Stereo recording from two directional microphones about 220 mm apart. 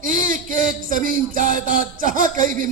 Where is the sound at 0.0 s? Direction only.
40° right (ahead or behind).